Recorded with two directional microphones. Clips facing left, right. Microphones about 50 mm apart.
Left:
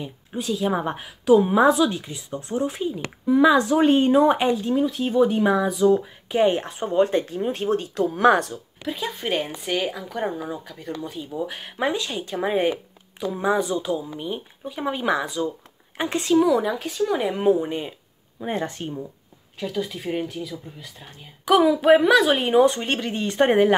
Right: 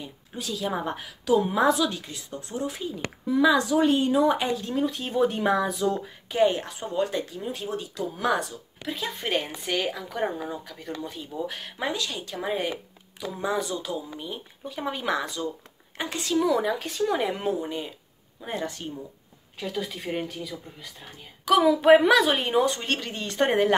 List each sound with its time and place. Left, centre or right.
0.0 s a woman's voice: left
4.7 s speech: centre; by 8.5 s left
8.8 s speech: centre
11.3 s a woman's voice: centre
16.0 s a woman's voice: left
16.4 s speech: centre
17.4 s a woman's voice: left
19.6 s speech: centre
22.7 s a woman's voice: left